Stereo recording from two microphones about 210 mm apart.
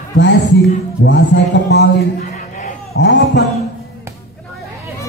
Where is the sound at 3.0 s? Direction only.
55° left (ahead or behind).